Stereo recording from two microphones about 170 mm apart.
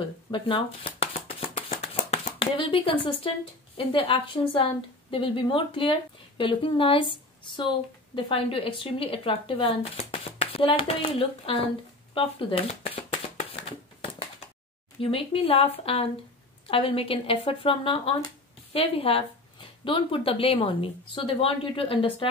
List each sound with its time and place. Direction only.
0.0 s speech: 30° left (ahead or behind)
12.1 s shuffling cards: 30° left (ahead or behind)
15.0 s speech: 35° left (ahead or behind)